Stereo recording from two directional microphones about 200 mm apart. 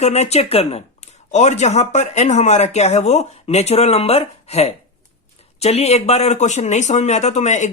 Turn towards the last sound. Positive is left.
turn(degrees=35)  # may be behind; listen again after turning